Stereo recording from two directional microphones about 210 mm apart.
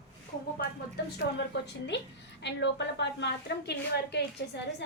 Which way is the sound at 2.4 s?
55° left (ahead or behind).